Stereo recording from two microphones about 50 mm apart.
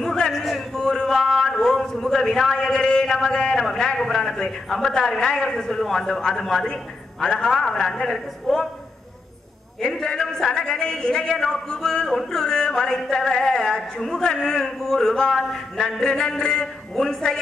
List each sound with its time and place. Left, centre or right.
0.0 s a woman's voice: centre
9.8 s a man's voice: centre